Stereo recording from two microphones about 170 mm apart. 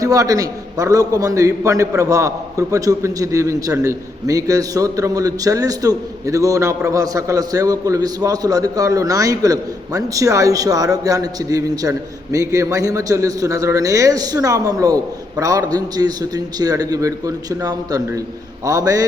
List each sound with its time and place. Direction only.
0.0 s a man's voice: 20° right (ahead or behind)